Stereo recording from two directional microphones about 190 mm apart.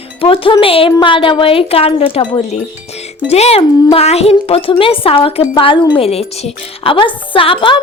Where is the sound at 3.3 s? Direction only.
35° left (ahead or behind).